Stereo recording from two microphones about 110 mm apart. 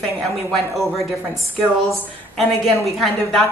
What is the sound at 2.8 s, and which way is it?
Speech, centre (ahead or behind).